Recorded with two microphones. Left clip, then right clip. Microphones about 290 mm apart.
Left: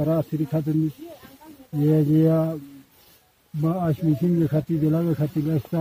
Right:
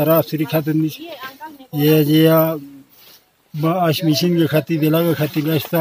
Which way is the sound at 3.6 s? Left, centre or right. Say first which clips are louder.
Right 9 dB; centre.